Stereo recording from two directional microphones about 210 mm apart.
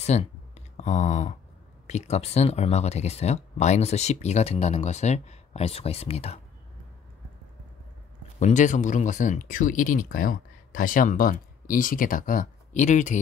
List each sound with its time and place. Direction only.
0.0 s a sound: 30° left (ahead or behind)
1.9 s speech: 30° left (ahead or behind)
8.4 s speech: 35° left (ahead or behind)